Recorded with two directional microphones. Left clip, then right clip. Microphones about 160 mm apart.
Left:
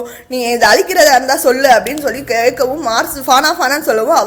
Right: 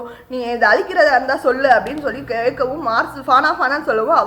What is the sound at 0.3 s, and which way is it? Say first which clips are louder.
A woman's voice: left 4 dB; 35° left (ahead or behind).